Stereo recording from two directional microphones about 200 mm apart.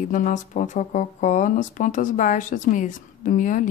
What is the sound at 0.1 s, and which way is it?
Speech, 40° left (ahead or behind).